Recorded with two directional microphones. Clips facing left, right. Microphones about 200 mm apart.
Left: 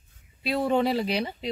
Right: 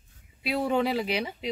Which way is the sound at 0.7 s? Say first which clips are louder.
Left 2 dB; 5° right (ahead or behind).